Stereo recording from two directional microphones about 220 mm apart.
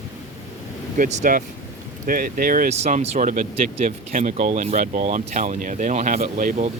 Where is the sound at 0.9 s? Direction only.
35° right (ahead or behind).